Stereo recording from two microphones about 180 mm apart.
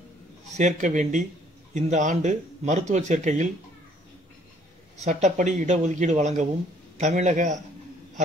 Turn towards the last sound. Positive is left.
turn(degrees=-40)  # may be behind; listen again after turning